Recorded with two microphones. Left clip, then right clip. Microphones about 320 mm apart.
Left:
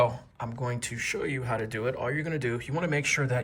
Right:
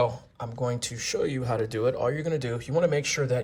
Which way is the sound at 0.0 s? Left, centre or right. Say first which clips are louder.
Left 1 dB; centre.